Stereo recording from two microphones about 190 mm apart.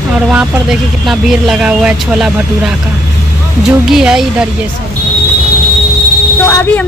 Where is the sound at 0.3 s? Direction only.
5° right (ahead or behind).